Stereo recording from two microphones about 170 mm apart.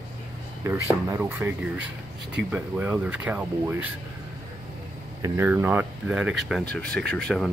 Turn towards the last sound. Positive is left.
turn(degrees=0)  # may be behind; listen again after turning